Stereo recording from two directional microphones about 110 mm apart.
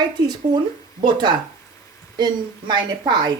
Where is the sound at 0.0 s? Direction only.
40° right (ahead or behind).